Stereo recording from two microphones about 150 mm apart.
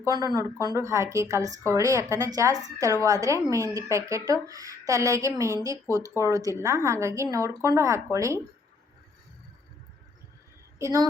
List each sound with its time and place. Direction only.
0.0 s speech: 25° right (ahead or behind)
10.8 s speech: 20° right (ahead or behind)